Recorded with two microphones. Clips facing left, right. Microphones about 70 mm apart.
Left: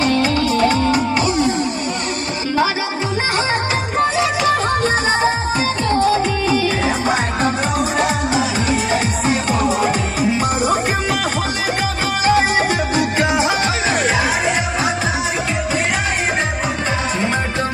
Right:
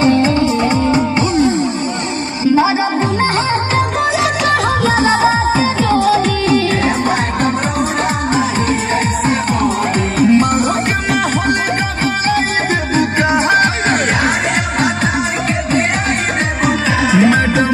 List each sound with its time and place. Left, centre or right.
0.0 s music: right
5.9 s music: right
13.2 s music: right
16.6 s music: right